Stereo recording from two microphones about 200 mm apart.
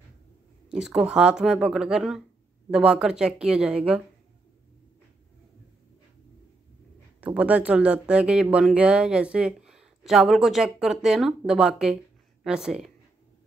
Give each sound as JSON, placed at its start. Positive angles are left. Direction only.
{"t": 0.7, "sound": "speech", "side_deg": -5}
{"t": 7.2, "sound": "speech", "side_deg": -5}